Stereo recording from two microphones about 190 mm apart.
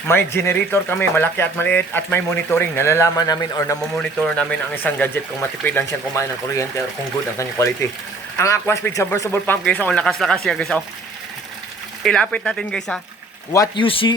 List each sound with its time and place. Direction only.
0.1 s speech: 10° left (ahead or behind)
8.4 s speech: 15° left (ahead or behind)
12.0 s speech: 5° left (ahead or behind)
13.5 s speech: 20° left (ahead or behind)